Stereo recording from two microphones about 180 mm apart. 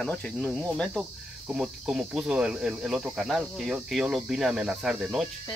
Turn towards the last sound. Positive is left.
turn(degrees=-5)  # may be behind; listen again after turning